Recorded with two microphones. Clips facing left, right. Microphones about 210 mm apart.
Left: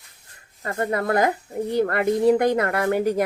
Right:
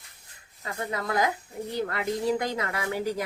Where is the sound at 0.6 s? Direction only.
55° left (ahead or behind).